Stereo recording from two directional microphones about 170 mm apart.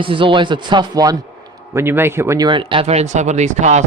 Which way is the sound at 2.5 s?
30° right (ahead or behind).